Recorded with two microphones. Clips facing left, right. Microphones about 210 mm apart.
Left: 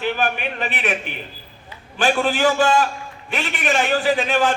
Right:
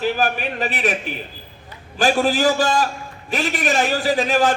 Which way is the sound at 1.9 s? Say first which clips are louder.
Right 2 dB; 40° right (ahead or behind).